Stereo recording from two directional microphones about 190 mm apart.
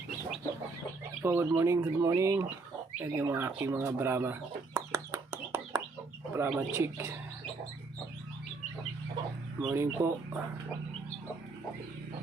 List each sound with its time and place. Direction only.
1.2 s speech: 10° right (ahead or behind)
9.6 s speech: 10° right (ahead or behind)